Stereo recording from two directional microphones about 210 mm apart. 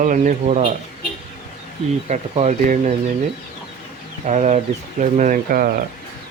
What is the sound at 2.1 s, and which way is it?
Speech, 35° right (ahead or behind).